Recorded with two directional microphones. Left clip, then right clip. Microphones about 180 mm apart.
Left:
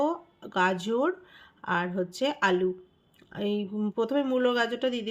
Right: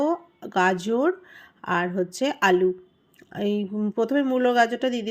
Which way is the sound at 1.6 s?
20° right (ahead or behind).